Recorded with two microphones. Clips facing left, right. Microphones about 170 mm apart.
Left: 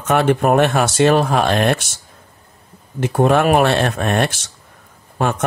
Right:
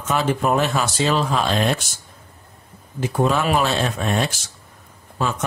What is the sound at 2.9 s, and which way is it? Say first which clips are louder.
Speech: left 5 dB; 60° left (ahead or behind).